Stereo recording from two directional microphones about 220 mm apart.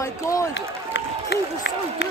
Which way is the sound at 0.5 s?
55° left (ahead or behind).